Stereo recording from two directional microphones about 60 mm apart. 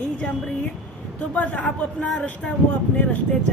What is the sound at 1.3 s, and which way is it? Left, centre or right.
A woman's voice, left.